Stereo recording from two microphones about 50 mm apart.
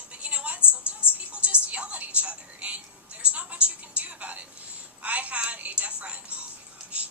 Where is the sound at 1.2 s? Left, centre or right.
Right.